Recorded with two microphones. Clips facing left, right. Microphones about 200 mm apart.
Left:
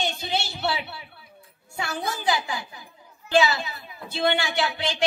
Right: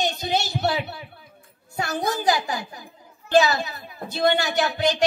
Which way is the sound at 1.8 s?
40° right (ahead or behind).